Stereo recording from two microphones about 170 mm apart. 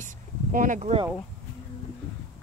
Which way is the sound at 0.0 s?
50° right (ahead or behind).